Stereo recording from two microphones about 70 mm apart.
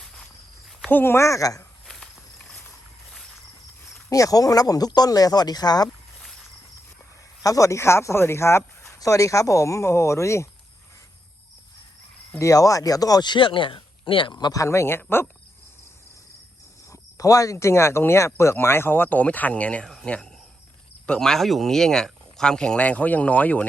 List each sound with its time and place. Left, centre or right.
0.0 s walk: centre
0.9 s a woman's voice: left
1.1 s speech: left
1.9 s walk: centre
4.1 s speech: left
7.4 s speech: left
12.4 s speech: left
14.5 s speech: left
16.9 s speech: left; by 19.8 s centre
19.8 s speech: centre